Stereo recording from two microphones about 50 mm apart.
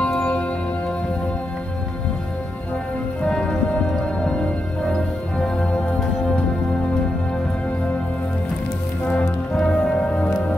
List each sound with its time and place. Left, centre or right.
0.0 s music: left
3.3 s music: centre
5.4 s music: left
9.1 s music: centre